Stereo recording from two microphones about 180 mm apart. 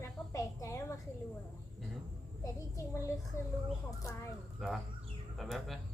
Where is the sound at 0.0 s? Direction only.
15° left (ahead or behind).